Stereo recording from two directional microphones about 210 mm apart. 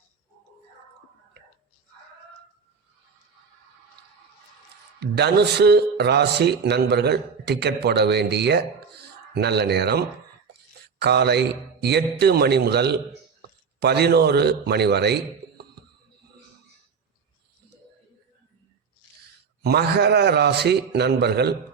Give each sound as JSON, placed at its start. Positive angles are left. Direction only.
{"t": 4.9, "sound": "a man's voice", "side_deg": -50}
{"t": 11.0, "sound": "a man's voice", "side_deg": -50}
{"t": 19.6, "sound": "a man's voice", "side_deg": -50}